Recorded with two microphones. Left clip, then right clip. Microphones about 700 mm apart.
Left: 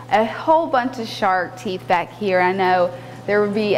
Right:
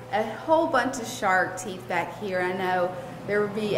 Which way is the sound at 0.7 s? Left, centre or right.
Left.